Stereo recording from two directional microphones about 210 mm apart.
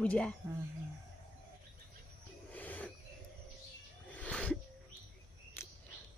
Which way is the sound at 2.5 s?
10° left (ahead or behind).